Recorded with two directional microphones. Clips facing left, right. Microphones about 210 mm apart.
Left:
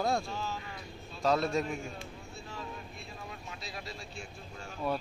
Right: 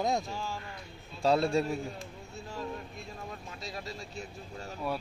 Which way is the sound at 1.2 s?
30° right (ahead or behind).